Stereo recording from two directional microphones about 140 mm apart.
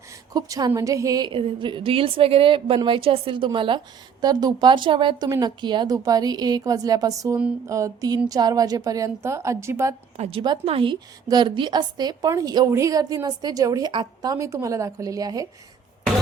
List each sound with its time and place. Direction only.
0.3 s a woman's voice: 25° right (ahead or behind)
1.3 s a woman's voice: 40° right (ahead or behind); by 9.9 s 20° right (ahead or behind)
10.2 s a woman's voice: 40° right (ahead or behind); by 15.4 s 25° right (ahead or behind)